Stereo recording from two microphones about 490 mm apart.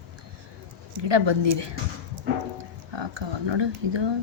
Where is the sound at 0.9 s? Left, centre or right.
Right.